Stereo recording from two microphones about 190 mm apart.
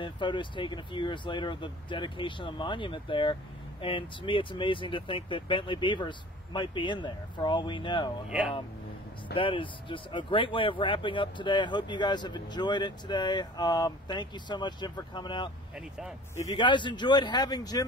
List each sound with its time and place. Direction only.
0.0 s speech: 25° left (ahead or behind)
8.3 s speech: 5° right (ahead or behind)
9.3 s speech: 25° left (ahead or behind)
15.7 s speech: centre (ahead or behind)
16.4 s speech: 25° left (ahead or behind)